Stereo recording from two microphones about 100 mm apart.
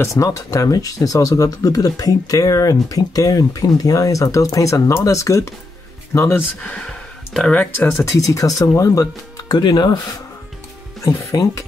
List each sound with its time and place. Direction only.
0.0 s speech: 30° left (ahead or behind)
6.6 s speech: 10° left (ahead or behind)
8.0 s speech: 30° left (ahead or behind); by 9.9 s 50° left (ahead or behind)
11.0 s speech: 35° left (ahead or behind)